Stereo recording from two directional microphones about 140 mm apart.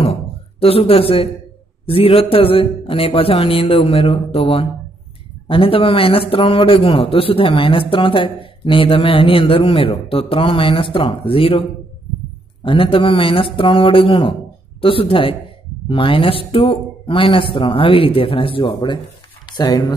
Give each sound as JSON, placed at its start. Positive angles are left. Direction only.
{"t": 0.0, "sound": "a sound", "side_deg": 45}
{"t": 1.9, "sound": "a man's voice", "side_deg": 40}
{"t": 12.6, "sound": "a man's voice", "side_deg": 40}